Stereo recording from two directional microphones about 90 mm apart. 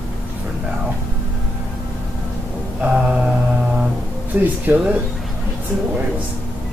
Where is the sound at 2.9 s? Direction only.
10° right (ahead or behind).